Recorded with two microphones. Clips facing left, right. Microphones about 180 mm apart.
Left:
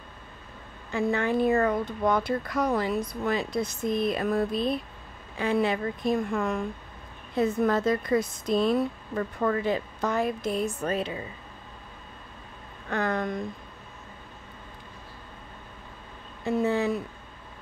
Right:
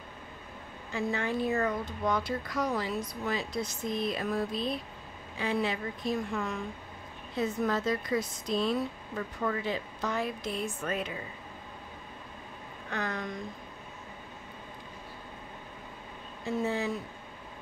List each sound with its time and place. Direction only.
0.9 s speech: 60° left (ahead or behind); by 11.1 s 30° left (ahead or behind)
12.9 s speech: 55° left (ahead or behind)
16.6 s speech: 60° left (ahead or behind)